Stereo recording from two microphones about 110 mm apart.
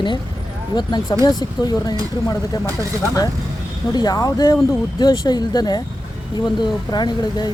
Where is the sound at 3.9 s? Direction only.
35° left (ahead or behind).